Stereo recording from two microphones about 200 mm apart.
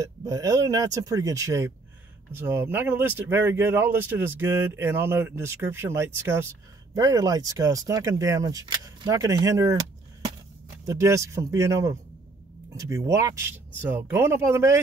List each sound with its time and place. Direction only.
0.0 s speech: 15° right (ahead or behind)